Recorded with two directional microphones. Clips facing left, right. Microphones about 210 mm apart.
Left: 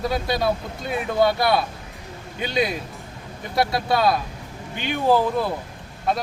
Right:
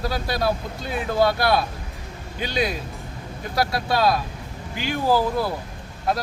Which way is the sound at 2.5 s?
25° left (ahead or behind).